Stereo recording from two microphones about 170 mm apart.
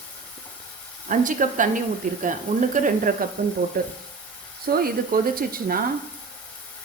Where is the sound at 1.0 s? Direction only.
50° right (ahead or behind).